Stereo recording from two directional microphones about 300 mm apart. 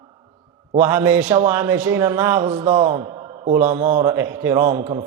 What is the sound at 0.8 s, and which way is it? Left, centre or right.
A man's voice, centre.